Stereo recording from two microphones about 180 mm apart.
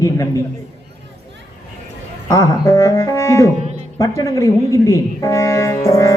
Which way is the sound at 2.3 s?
15° left (ahead or behind).